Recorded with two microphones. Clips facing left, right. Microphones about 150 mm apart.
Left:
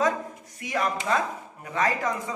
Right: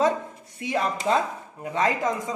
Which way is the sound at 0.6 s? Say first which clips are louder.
Right 1 dB; 30° right (ahead or behind).